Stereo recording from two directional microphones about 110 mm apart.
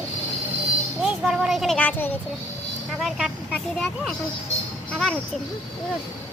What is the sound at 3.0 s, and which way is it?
A child's voice, 5° right (ahead or behind).